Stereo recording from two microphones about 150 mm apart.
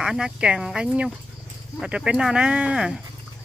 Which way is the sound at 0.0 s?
5° right (ahead or behind).